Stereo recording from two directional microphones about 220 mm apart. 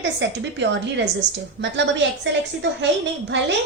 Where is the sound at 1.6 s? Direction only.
55° right (ahead or behind).